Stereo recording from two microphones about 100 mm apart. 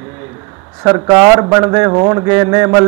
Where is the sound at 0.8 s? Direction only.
35° right (ahead or behind).